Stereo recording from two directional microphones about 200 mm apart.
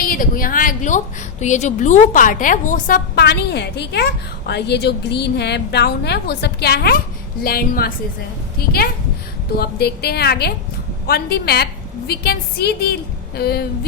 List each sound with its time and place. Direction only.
0.0 s a woman's voice: 45° left (ahead or behind)
9.6 s a woman's voice: 50° left (ahead or behind)